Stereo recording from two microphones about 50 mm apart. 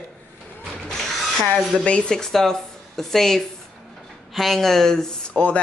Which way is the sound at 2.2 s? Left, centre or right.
Centre.